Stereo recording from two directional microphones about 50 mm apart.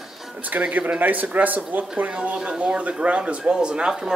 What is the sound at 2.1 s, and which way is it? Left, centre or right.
Speech, right.